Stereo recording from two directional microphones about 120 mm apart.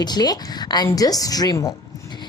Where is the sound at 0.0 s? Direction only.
35° left (ahead or behind).